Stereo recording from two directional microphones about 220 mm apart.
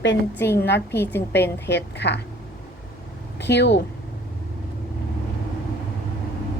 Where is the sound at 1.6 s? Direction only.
50° left (ahead or behind).